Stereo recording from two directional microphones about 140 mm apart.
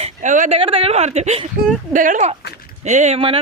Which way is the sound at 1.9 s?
65° right (ahead or behind).